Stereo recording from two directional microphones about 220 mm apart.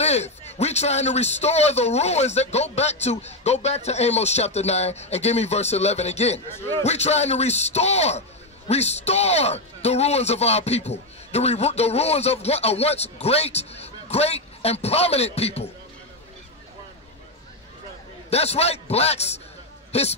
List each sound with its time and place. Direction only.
0.0 s a man's voice: 30° left (ahead or behind)
6.5 s a man's voice: 10° left (ahead or behind)
6.8 s a man's voice: 30° left (ahead or behind)
18.3 s a man's voice: 30° left (ahead or behind)